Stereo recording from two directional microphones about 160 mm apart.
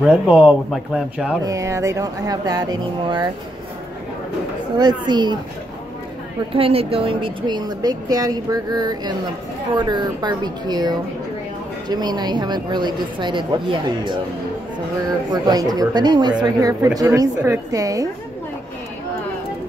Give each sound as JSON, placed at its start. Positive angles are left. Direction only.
{"t": 0.0, "sound": "speech", "side_deg": -5}
{"t": 1.4, "sound": "speech", "side_deg": -20}
{"t": 4.7, "sound": "speech", "side_deg": -25}
{"t": 6.5, "sound": "speech", "side_deg": -35}
{"t": 15.3, "sound": "speech", "side_deg": -25}